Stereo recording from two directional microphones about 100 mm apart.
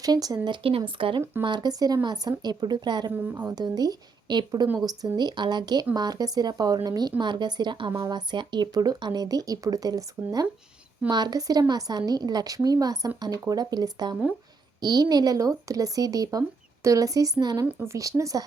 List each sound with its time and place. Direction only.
0.0 s speech: 40° right (ahead or behind); by 1.2 s 60° right (ahead or behind)
1.4 s speech: 45° right (ahead or behind)
7.9 s speech: 35° right (ahead or behind)
8.3 s speech: 50° right (ahead or behind)